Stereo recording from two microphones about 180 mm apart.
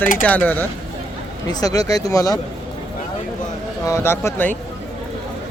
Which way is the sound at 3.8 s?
15° left (ahead or behind).